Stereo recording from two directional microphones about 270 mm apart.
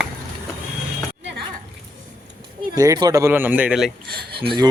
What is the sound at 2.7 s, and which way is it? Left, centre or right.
Speech, centre.